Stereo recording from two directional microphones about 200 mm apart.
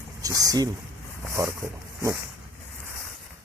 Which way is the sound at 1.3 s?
15° right (ahead or behind).